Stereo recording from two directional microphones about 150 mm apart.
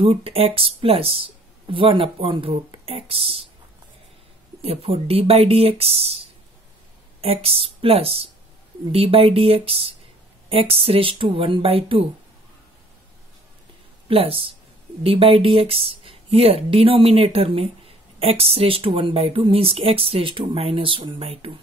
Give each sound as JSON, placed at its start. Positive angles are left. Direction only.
{"t": 0.0, "sound": "speech", "side_deg": -40}
{"t": 4.6, "sound": "speech", "side_deg": -40}
{"t": 14.0, "sound": "speech", "side_deg": -40}